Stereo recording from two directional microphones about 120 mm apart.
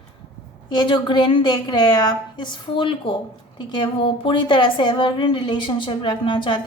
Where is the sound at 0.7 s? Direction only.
40° left (ahead or behind).